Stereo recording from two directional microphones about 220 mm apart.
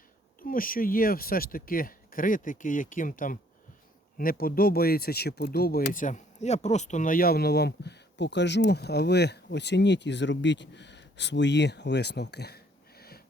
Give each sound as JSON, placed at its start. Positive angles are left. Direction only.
{"t": 0.3, "sound": "speech", "side_deg": 40}